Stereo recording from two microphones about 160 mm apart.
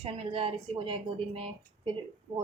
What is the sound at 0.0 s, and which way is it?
Speech, 35° right (ahead or behind).